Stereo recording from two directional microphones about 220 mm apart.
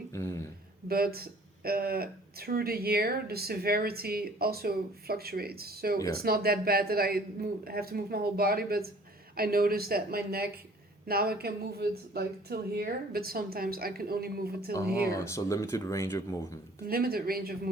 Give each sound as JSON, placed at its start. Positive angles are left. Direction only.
{"t": 0.1, "sound": "speech", "side_deg": 10}
{"t": 0.9, "sound": "speech", "side_deg": -45}
{"t": 15.1, "sound": "speech", "side_deg": 15}
{"t": 16.8, "sound": "speech", "side_deg": -45}